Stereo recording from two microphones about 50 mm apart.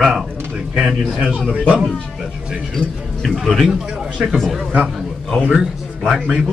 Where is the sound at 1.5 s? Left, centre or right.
Right.